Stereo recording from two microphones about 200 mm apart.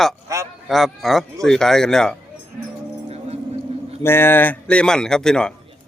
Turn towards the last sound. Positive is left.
turn(degrees=5)  # may be behind; listen again after turning